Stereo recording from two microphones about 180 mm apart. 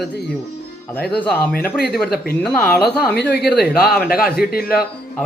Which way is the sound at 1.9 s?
5° left (ahead or behind).